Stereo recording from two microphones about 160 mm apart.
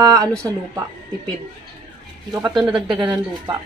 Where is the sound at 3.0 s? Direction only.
25° right (ahead or behind).